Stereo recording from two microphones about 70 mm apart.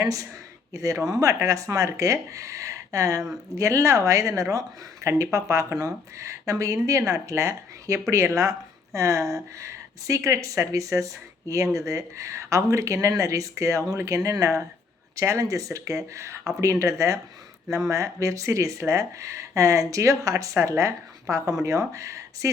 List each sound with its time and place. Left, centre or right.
0.0 s speech: right